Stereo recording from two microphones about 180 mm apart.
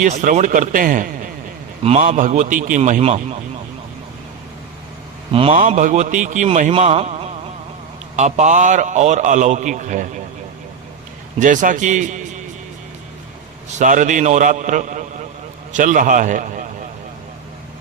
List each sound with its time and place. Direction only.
0.0 s a man's voice: 40° right (ahead or behind)
5.3 s a man's voice: 30° right (ahead or behind)
5.5 s a man's voice: 45° right (ahead or behind)
11.3 s a man's voice: 45° right (ahead or behind)
13.7 s a man's voice: 45° right (ahead or behind)